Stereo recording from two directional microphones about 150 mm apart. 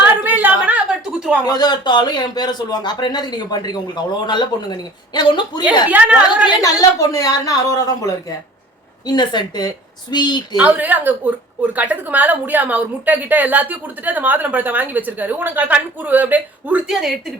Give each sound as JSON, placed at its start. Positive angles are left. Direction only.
{"t": 0.3, "sound": "a sound", "side_deg": -10}
{"t": 1.5, "sound": "speech", "side_deg": 25}
{"t": 5.9, "sound": "a woman's voice", "side_deg": -10}
{"t": 6.6, "sound": "speech", "side_deg": 25}
{"t": 9.0, "sound": "speech", "side_deg": 30}
{"t": 10.6, "sound": "a woman's voice", "side_deg": -10}